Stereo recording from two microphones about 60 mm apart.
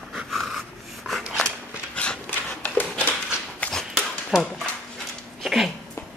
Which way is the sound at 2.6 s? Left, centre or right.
Left.